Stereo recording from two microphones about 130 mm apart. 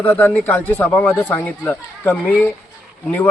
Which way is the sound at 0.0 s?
15° left (ahead or behind).